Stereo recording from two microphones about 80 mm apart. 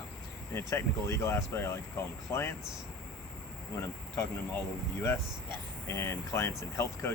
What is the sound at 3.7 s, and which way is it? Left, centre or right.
Speech, left.